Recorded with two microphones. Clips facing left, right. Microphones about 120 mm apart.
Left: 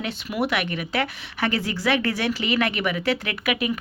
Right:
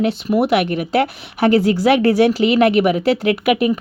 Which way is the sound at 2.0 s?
35° right (ahead or behind).